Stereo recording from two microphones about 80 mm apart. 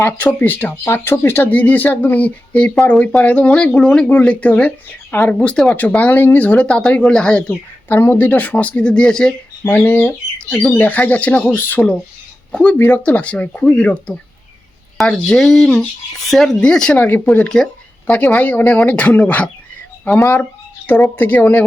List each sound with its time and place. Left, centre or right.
0.2 s speech: left
5.3 s speech: centre
7.9 s speech: left; by 9.3 s centre
9.6 s speech: left
12.5 s a sound: centre
12.7 s speech: left
14.9 s speech: centre
17.3 s a sound: centre
18.1 s speech: left
20.1 s speech: left
20.4 s speech: left